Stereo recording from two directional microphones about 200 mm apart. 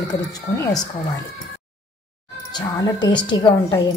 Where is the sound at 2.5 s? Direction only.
20° left (ahead or behind).